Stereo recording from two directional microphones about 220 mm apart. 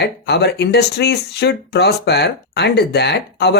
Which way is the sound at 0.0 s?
50° left (ahead or behind).